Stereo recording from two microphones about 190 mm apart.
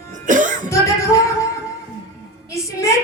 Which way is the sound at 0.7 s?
15° left (ahead or behind).